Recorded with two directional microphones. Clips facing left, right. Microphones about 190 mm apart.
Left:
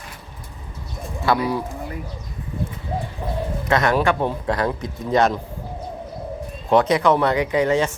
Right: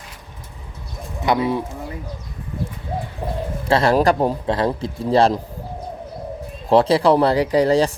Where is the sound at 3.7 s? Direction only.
30° right (ahead or behind).